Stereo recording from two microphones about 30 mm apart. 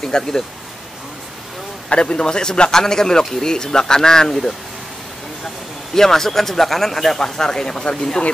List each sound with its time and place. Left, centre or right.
0.0 s a man's voice: left
1.9 s a man's voice: left
2.7 s a man's voice: centre
5.9 s speech: centre